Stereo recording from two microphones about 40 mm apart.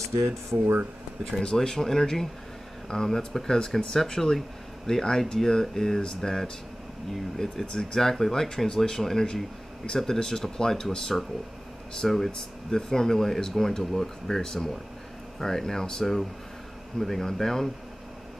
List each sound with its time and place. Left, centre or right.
1.4 s speech: centre